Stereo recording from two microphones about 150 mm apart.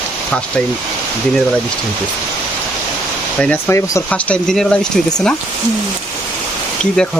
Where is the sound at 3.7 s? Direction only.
20° left (ahead or behind).